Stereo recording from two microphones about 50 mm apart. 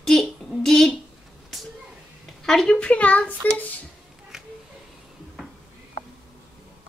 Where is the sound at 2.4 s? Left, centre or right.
Centre.